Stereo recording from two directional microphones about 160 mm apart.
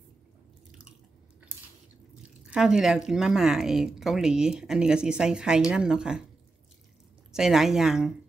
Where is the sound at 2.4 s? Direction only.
5° right (ahead or behind).